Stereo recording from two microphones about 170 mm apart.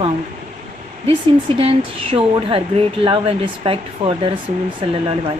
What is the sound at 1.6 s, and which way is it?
Speech, 35° right (ahead or behind).